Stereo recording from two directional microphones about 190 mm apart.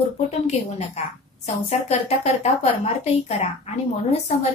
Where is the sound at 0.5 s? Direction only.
35° left (ahead or behind).